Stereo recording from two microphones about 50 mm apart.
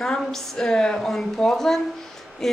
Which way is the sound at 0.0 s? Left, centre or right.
Centre.